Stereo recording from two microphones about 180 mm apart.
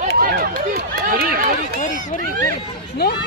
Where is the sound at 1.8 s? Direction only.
45° left (ahead or behind).